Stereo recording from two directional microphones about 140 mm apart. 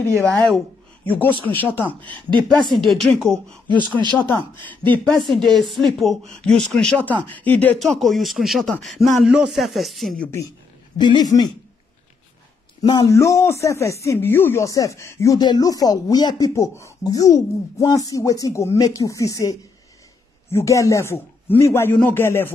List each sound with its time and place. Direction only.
0.3 s a man's voice: 5° left (ahead or behind)
2.0 s speech: 35° right (ahead or behind)
2.8 s speech: centre (ahead or behind)
4.9 s a man's voice: 10° left (ahead or behind)
11.0 s speech: 30° left (ahead or behind)
12.8 s speech: 25° left (ahead or behind)
20.5 s a man's voice: 20° left (ahead or behind)